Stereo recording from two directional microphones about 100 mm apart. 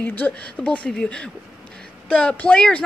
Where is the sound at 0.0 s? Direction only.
20° left (ahead or behind).